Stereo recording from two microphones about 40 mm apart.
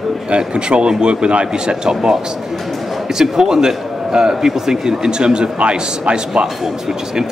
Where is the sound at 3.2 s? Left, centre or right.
Centre.